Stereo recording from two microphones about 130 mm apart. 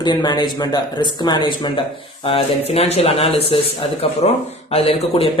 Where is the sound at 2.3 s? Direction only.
50° left (ahead or behind).